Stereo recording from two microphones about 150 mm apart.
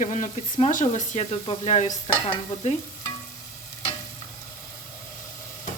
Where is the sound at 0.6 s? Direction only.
50° left (ahead or behind).